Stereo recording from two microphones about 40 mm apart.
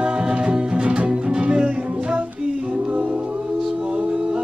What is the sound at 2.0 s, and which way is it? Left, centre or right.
Music, right.